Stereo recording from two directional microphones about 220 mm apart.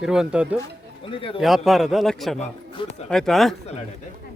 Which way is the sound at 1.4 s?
Centre (ahead or behind).